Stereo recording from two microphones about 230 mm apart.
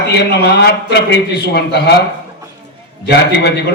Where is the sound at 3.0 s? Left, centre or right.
Left.